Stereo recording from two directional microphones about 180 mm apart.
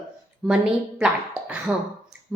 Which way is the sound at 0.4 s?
5° right (ahead or behind).